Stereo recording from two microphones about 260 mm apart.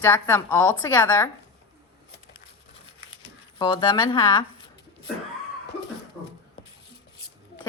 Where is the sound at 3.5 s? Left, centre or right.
Centre.